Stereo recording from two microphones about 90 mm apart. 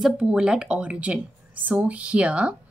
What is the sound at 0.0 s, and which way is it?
Speech, 10° right (ahead or behind).